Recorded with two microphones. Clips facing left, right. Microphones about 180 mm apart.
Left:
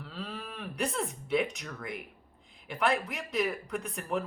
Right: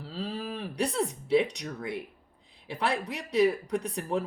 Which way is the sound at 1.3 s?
35° right (ahead or behind).